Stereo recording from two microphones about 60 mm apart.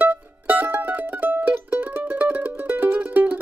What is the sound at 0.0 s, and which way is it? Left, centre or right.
Mandolin, right.